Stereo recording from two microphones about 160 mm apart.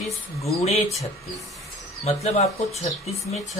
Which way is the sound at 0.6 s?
40° left (ahead or behind).